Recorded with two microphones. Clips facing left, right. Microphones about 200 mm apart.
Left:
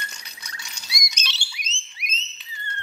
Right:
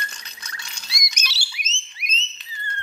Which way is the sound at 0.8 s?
30° right (ahead or behind).